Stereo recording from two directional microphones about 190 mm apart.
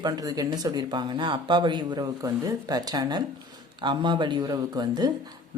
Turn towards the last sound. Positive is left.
turn(degrees=-20)  # may be behind; listen again after turning